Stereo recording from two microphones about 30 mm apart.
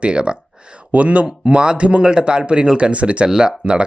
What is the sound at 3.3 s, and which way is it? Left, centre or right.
Speech, right.